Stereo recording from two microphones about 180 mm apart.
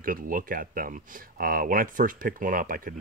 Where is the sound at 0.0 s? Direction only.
50° right (ahead or behind).